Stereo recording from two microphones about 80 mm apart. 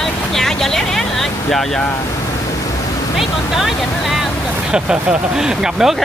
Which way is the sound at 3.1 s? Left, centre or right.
Centre.